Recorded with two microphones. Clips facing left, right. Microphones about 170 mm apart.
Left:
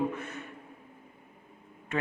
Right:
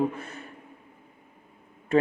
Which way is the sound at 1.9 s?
35° right (ahead or behind).